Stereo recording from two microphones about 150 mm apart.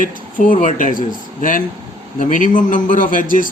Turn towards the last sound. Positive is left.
turn(degrees=65)  # may be behind; listen again after turning